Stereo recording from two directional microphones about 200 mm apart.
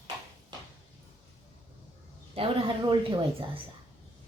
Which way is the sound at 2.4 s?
30° right (ahead or behind).